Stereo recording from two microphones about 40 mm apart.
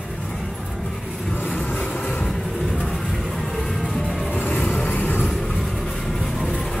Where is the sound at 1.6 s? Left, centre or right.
Left.